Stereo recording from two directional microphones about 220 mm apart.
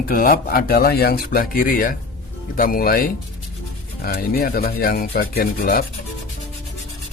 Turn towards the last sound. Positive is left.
turn(degrees=40)  # may be behind; listen again after turning